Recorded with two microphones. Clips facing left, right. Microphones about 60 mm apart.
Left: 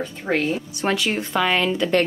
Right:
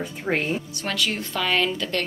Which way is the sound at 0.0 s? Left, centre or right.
Centre.